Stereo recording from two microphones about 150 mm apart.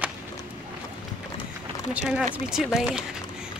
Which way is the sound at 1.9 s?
5° right (ahead or behind).